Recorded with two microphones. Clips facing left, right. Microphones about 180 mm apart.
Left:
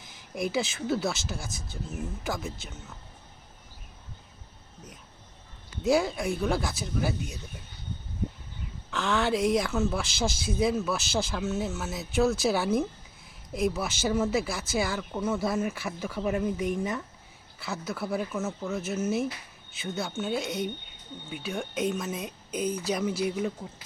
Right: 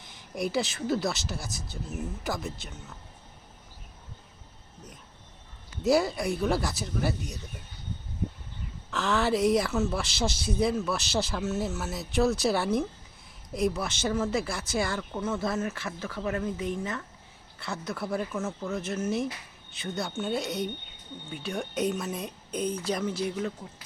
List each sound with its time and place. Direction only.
0.0 s a woman's voice: centre (ahead or behind)
5.8 s a woman's voice: centre (ahead or behind)
8.9 s a woman's voice: centre (ahead or behind)
17.6 s a woman's voice: 5° left (ahead or behind)